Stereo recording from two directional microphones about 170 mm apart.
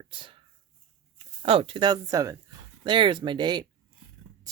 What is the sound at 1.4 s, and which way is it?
Speech, 30° right (ahead or behind).